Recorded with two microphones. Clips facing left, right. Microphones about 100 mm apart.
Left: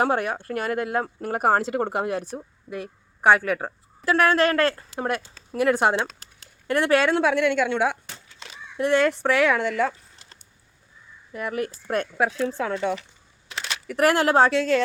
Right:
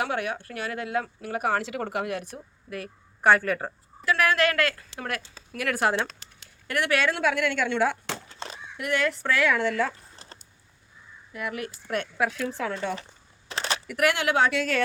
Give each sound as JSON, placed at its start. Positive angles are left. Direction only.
{"t": 0.0, "sound": "speech", "side_deg": 40}
{"t": 2.6, "sound": "speech", "side_deg": 20}
{"t": 4.0, "sound": "a woman's voice", "side_deg": 35}
{"t": 8.3, "sound": "fowl", "side_deg": -40}
{"t": 8.8, "sound": "a woman's voice", "side_deg": 30}
{"t": 11.3, "sound": "speech", "side_deg": 40}
{"t": 13.5, "sound": "a sound", "side_deg": -35}
{"t": 13.8, "sound": "speech", "side_deg": 35}